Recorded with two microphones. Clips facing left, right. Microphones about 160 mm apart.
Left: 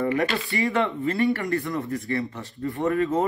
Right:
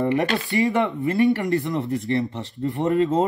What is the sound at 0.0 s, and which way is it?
Speech, 20° right (ahead or behind).